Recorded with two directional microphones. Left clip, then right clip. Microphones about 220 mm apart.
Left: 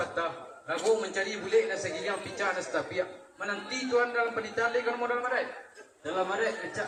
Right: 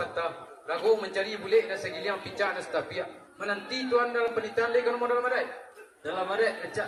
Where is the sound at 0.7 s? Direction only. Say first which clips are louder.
Right 2 dB; 55° right (ahead or behind).